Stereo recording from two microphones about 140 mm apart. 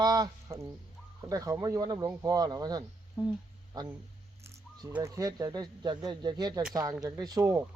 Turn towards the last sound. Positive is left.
turn(degrees=-25)  # may be behind; listen again after turning